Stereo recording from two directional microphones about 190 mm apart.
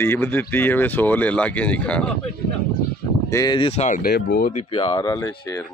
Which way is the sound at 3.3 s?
20° left (ahead or behind).